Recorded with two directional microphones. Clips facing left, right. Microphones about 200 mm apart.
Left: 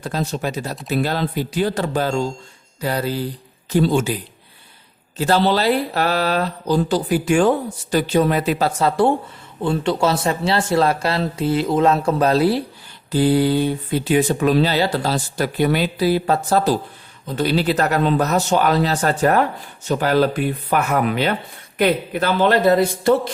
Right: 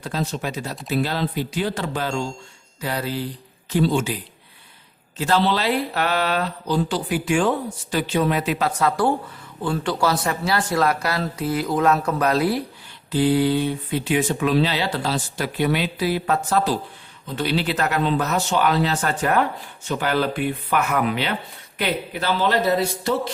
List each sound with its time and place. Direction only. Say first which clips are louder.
0.0 s speech: left 3 dB; 45° left (ahead or behind)
5.1 s a man's voice: left 3 dB; 35° left (ahead or behind)
13.1 s speech: left 2 dB; 40° left (ahead or behind)